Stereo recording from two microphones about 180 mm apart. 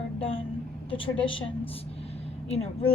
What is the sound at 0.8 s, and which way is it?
A woman's voice, 30° left (ahead or behind).